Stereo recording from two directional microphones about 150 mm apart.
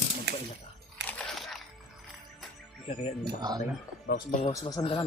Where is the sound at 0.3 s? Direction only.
90° right.